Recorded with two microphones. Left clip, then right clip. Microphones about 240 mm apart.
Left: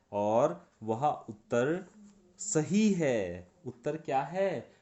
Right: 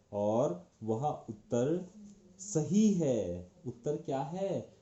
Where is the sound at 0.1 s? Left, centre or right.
Left.